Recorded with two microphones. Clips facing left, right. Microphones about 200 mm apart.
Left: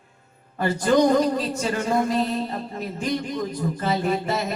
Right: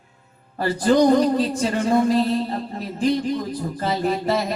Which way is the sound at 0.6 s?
35° right (ahead or behind).